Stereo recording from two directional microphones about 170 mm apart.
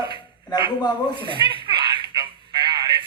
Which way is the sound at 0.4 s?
25° left (ahead or behind).